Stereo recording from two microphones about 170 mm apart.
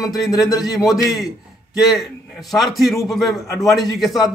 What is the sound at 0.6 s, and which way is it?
Speech, centre (ahead or behind).